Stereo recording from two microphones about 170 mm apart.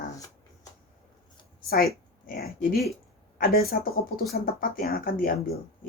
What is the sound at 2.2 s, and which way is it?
Speech, 60° left (ahead or behind).